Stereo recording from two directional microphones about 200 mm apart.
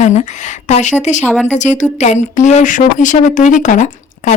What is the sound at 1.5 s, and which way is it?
Speech, 35° left (ahead or behind).